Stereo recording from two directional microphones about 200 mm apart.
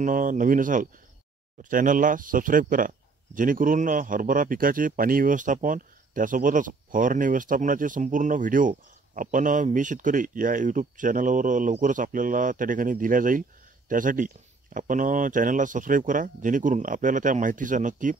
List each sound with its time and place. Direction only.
0.0 s speech: 40° right (ahead or behind)